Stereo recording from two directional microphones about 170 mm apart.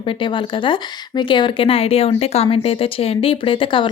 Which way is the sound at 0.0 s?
30° left (ahead or behind).